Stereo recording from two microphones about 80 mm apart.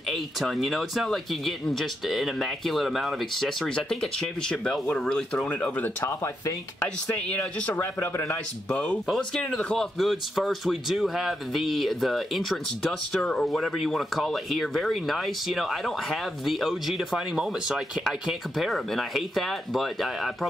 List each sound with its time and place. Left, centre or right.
0.1 s speech: centre
6.0 s speech: left
7.1 s speech: centre
7.7 s a man's voice: left
8.6 s speech: centre
9.0 s speech: centre